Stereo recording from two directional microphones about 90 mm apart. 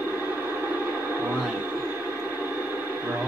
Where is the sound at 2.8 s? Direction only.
25° right (ahead or behind).